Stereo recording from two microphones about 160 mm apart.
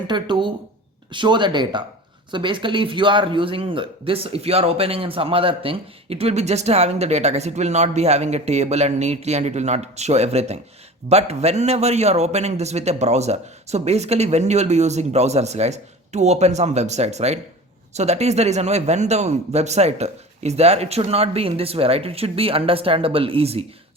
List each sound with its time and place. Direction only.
0.1 s a man's voice: 30° right (ahead or behind)